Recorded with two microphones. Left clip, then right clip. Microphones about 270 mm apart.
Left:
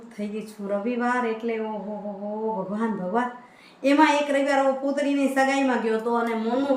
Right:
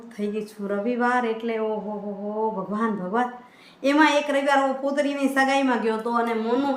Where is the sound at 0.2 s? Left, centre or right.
Centre.